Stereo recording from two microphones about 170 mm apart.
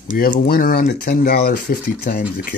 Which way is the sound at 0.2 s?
60° left (ahead or behind).